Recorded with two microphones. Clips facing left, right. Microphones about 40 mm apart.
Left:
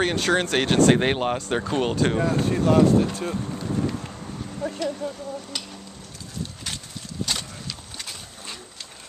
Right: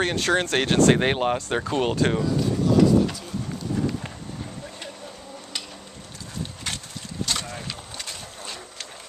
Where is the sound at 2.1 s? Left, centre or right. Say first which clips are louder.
Left 1 dB; left.